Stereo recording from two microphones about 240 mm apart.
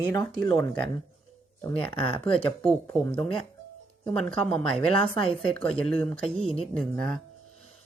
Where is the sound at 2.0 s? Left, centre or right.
Left.